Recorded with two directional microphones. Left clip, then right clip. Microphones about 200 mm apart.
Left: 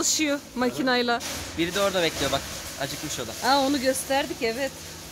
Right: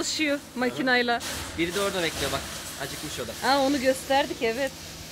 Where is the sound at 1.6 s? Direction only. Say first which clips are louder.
Left 3 dB; 65° left (ahead or behind).